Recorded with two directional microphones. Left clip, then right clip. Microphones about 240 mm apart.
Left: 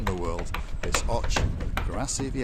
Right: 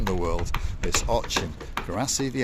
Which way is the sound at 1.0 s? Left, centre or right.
Right.